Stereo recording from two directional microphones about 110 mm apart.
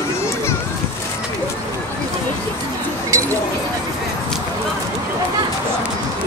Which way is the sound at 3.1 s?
30° right (ahead or behind).